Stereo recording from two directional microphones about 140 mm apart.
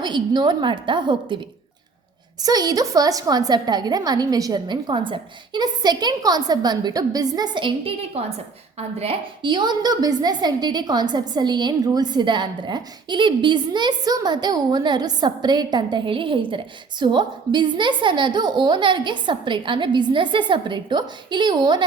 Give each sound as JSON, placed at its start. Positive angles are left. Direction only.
{"t": 0.0, "sound": "a woman's voice", "side_deg": -30}
{"t": 2.4, "sound": "a woman's voice", "side_deg": -30}